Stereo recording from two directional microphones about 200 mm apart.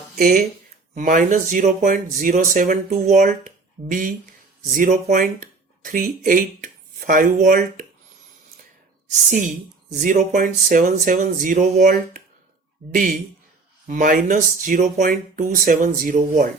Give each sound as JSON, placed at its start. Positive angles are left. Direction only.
{"t": 0.2, "sound": "speech", "side_deg": -45}
{"t": 9.3, "sound": "speech", "side_deg": -40}